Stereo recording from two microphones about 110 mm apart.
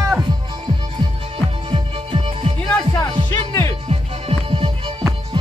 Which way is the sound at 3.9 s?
55° right (ahead or behind).